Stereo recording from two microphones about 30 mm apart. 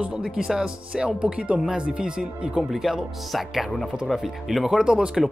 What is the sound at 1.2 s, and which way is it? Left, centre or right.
Speech, right.